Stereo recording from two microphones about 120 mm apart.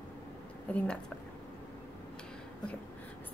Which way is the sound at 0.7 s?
10° left (ahead or behind).